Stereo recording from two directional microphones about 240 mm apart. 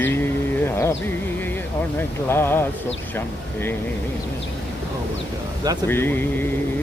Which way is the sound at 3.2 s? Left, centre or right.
Centre.